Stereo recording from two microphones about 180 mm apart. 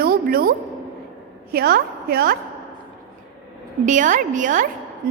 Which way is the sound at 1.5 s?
60° right (ahead or behind).